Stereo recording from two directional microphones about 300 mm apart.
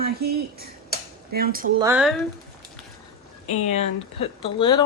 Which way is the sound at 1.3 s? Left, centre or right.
Right.